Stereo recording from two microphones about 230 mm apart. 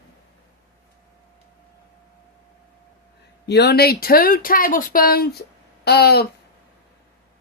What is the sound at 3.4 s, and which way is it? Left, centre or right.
Speech, left.